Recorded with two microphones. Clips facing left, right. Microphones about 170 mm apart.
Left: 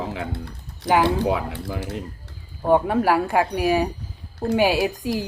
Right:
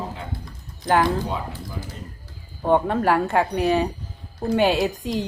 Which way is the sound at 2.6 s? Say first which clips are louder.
Left 1 dB; 5° left (ahead or behind).